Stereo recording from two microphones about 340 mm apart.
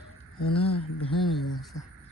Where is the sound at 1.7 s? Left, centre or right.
Left.